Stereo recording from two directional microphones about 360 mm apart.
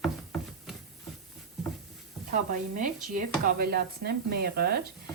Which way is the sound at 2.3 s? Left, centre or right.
Right.